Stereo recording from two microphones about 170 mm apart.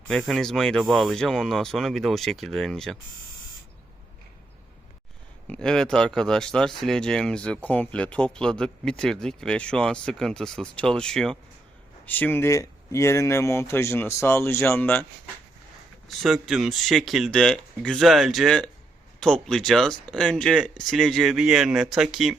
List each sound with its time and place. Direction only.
0.1 s speech: 5° left (ahead or behind)
5.5 s speech: 5° left (ahead or behind)
16.0 s speech: centre (ahead or behind)